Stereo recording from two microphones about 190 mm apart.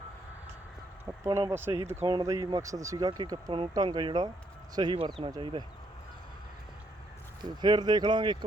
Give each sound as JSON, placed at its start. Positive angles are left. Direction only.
{"t": 1.2, "sound": "speech", "side_deg": -15}
{"t": 7.4, "sound": "speech", "side_deg": -20}